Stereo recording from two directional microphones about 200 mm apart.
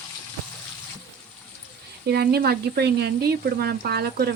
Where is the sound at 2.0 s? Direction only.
50° right (ahead or behind).